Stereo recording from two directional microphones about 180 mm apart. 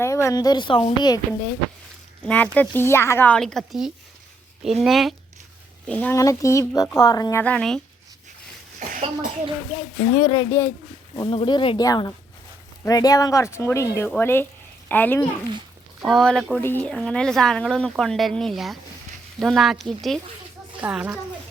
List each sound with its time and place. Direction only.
0.0 s a woman's voice: 15° left (ahead or behind)
2.2 s speech: 5° left (ahead or behind)
7.4 s speech: 5° left (ahead or behind)
8.8 s a sound: 40° right (ahead or behind)
10.1 s a woman's voice: 25° left (ahead or behind)
11.1 s a woman's voice: 30° left (ahead or behind); by 15.3 s 10° left (ahead or behind)
16.0 s speech: centre (ahead or behind)